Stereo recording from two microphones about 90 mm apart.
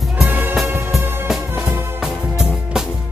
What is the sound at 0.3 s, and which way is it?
Music, 20° right (ahead or behind).